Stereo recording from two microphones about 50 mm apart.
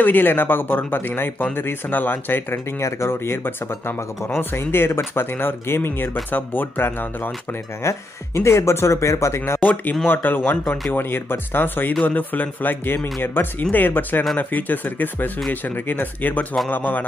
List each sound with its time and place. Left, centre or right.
0.0 s speech: left
2.5 s speech: left
8.4 s speech: left
10.0 s speech: left